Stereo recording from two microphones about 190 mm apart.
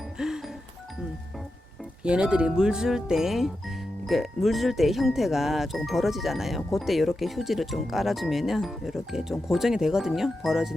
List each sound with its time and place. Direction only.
0.2 s music: 5° right (ahead or behind)
2.0 s speech: 5° right (ahead or behind)